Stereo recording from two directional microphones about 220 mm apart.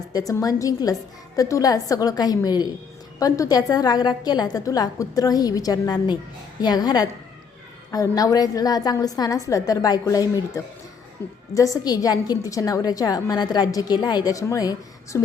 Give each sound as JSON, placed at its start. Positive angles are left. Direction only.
{"t": 0.1, "sound": "a woman's voice", "side_deg": 15}